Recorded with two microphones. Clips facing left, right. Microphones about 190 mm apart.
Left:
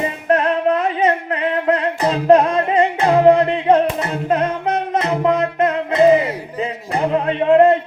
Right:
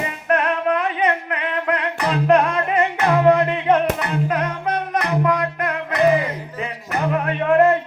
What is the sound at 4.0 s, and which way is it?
Music, 25° left (ahead or behind).